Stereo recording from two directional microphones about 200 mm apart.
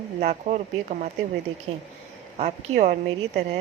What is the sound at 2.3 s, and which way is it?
Speech, 35° right (ahead or behind).